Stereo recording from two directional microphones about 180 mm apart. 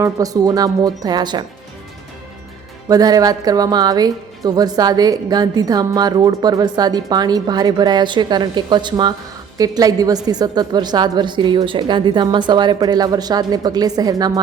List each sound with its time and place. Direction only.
0.0 s a woman's voice: 20° right (ahead or behind)
2.9 s a woman's voice: 20° right (ahead or behind)